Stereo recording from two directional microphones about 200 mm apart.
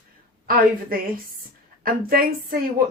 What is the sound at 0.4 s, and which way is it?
A woman's voice, 45° right (ahead or behind).